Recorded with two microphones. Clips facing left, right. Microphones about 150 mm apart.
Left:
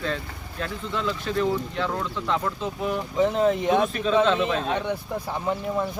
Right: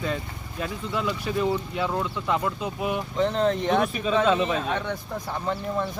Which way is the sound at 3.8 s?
5° right (ahead or behind).